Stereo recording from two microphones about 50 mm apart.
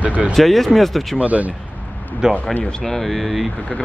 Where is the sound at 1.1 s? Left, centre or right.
Right.